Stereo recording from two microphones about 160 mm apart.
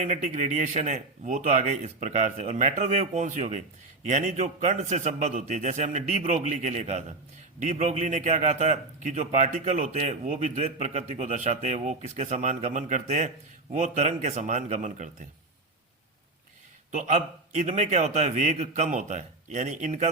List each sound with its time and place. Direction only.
0.0 s a man's voice: 45° right (ahead or behind)
16.9 s a man's voice: 45° right (ahead or behind)